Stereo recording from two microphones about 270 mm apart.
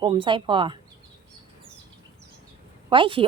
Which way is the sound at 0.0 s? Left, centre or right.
Centre.